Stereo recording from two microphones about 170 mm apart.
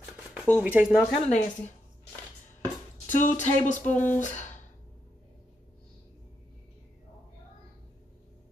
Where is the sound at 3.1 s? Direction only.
45° left (ahead or behind).